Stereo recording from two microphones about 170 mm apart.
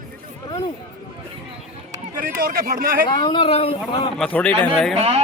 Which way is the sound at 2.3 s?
60° right (ahead or behind).